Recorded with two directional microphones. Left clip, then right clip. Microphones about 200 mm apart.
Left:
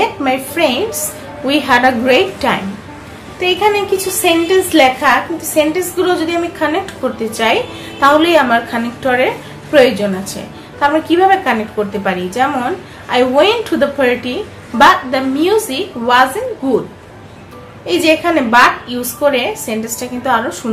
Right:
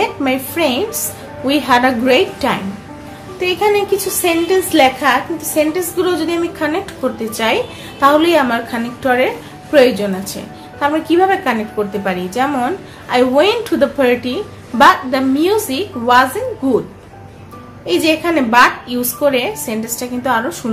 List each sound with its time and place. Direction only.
0.0 s a sound: 15° right (ahead or behind)
0.6 s a woman's voice: 15° right (ahead or behind)
17.8 s a woman's voice: 20° right (ahead or behind)